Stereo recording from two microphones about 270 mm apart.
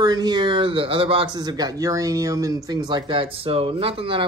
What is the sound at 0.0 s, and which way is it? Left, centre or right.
A man's voice, centre.